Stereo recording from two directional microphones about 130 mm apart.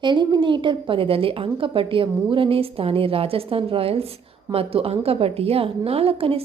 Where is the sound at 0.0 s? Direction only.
35° right (ahead or behind).